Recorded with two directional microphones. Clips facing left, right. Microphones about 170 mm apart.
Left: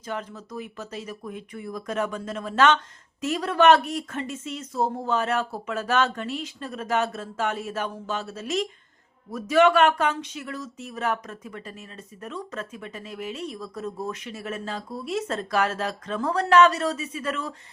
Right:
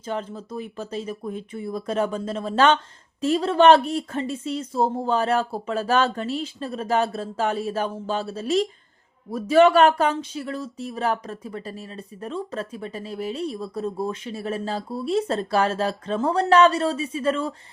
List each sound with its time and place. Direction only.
0.0 s speech: 30° right (ahead or behind)